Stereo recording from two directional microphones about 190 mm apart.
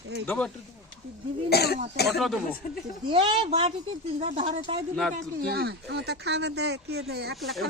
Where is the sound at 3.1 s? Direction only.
25° right (ahead or behind).